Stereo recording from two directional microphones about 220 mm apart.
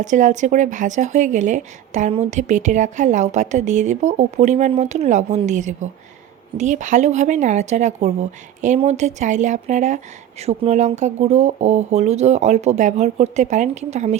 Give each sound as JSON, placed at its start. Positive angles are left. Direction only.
{"t": 0.0, "sound": "speech", "side_deg": -35}